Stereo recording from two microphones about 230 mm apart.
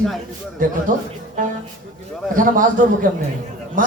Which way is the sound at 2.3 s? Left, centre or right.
Right.